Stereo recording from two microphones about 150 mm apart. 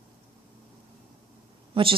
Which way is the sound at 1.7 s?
35° right (ahead or behind).